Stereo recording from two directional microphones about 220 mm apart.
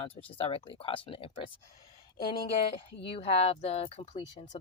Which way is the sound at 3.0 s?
25° left (ahead or behind).